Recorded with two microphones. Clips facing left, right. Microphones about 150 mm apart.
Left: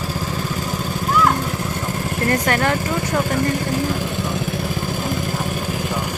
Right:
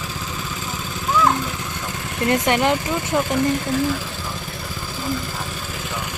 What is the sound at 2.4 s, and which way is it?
Speech, 20° right (ahead or behind).